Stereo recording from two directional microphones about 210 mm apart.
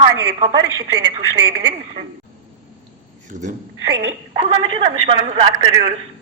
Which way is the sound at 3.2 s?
35° right (ahead or behind).